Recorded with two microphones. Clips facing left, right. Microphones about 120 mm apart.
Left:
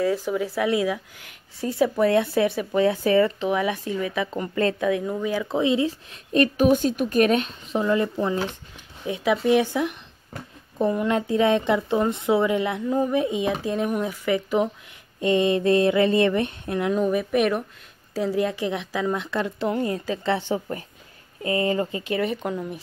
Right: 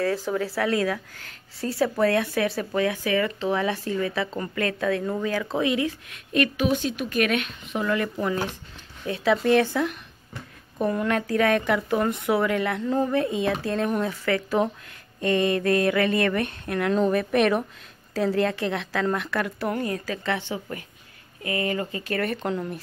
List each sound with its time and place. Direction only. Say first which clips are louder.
0.0 s a woman's voice: left 2 dB; 15° left (ahead or behind)
3.4 s a woman's voice: left 1 dB; 15° left (ahead or behind)
4.6 s speech: left 5 dB; 25° left (ahead or behind)
5.2 s a woman's voice: left 2 dB; 15° left (ahead or behind)
9.0 s a woman's voice: even; 15° left (ahead or behind)
16.9 s a woman's voice: right 1 dB; 10° left (ahead or behind)
22.4 s speech: right 1 dB; 5° left (ahead or behind)